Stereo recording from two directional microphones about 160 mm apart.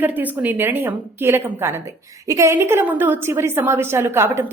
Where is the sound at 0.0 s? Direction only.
10° right (ahead or behind).